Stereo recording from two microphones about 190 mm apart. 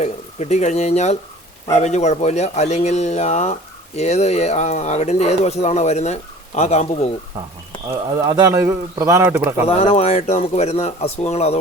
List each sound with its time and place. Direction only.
0.0 s speech: 35° left (ahead or behind)
8.1 s a man's voice: 15° right (ahead or behind)
9.6 s speech: 35° left (ahead or behind)